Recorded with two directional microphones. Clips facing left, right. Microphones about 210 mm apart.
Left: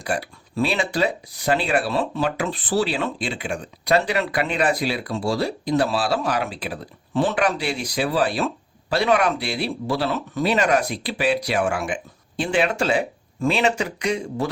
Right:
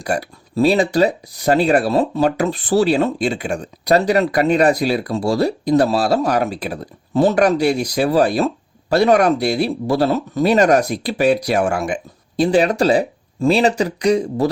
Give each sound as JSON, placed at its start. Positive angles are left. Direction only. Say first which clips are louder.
{"t": 0.0, "sound": "speech", "louder": "right 4 dB", "side_deg": -40}